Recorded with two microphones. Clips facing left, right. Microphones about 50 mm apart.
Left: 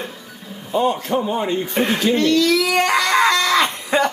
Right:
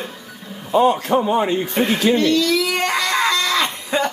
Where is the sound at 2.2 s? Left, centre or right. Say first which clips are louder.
Left 1 dB; left.